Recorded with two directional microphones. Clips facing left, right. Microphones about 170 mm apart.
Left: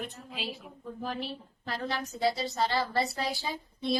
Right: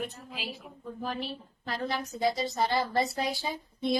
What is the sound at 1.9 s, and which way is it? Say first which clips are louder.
A woman's voice: even; 15° right (ahead or behind).